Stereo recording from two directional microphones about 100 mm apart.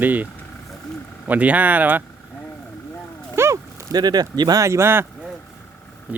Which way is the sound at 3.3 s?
25° right (ahead or behind).